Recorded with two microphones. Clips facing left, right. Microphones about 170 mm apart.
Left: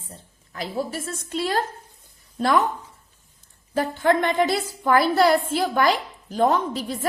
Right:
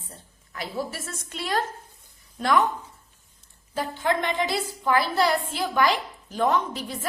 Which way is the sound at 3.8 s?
50° left (ahead or behind).